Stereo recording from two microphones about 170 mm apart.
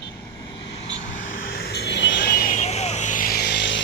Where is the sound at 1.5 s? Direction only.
70° left (ahead or behind); by 2.4 s 90° left.